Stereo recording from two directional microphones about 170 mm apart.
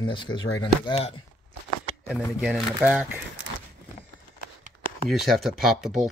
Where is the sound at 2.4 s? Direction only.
5° right (ahead or behind).